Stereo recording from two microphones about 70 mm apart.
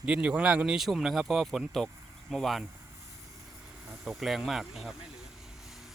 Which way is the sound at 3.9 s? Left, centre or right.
Centre.